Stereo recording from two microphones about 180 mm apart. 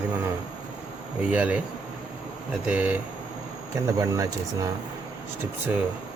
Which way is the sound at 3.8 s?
20° right (ahead or behind).